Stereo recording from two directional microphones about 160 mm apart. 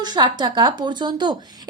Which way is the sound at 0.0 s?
25° right (ahead or behind).